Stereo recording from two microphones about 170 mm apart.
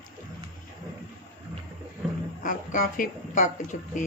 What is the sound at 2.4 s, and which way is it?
Speech, 50° left (ahead or behind).